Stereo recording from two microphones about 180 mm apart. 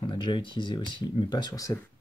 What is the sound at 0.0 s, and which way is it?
Speech, 25° left (ahead or behind).